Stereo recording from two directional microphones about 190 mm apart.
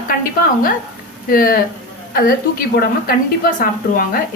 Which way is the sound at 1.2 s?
50° left (ahead or behind).